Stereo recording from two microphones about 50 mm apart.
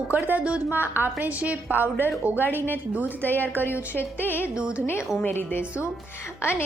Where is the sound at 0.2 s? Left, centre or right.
Right.